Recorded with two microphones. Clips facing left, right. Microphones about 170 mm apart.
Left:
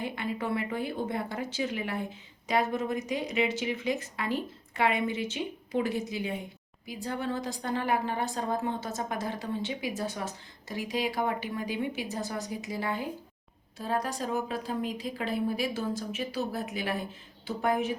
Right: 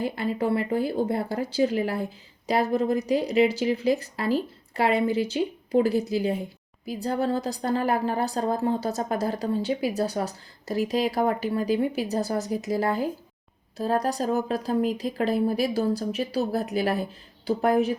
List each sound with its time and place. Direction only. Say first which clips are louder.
0.0 s speech: right 7 dB; 35° right (ahead or behind)